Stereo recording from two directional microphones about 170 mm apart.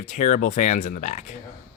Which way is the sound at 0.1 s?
45° left (ahead or behind).